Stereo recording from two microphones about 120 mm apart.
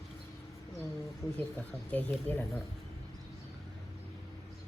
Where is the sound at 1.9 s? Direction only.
15° left (ahead or behind).